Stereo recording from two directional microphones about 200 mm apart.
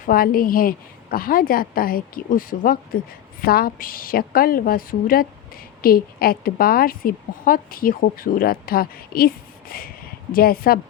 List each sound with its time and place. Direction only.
0.0 s a woman's voice: 45° left (ahead or behind)